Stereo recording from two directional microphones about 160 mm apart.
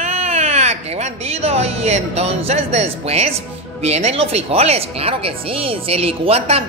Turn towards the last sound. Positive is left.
turn(degrees=-40)  # may be behind; listen again after turning